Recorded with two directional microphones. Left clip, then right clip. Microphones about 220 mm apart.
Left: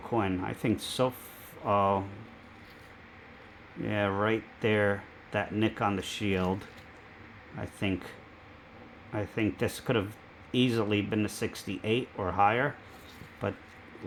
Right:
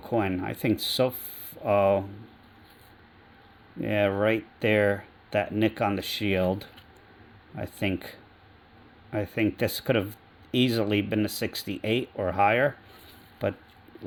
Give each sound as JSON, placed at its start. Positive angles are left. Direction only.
{"t": 0.1, "sound": "speech", "side_deg": -40}
{"t": 3.8, "sound": "speech", "side_deg": -40}
{"t": 7.6, "sound": "speech", "side_deg": -40}
{"t": 9.1, "sound": "speech", "side_deg": -35}